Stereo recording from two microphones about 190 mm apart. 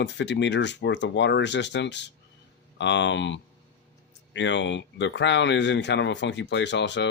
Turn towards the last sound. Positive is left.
turn(degrees=65)  # may be behind; listen again after turning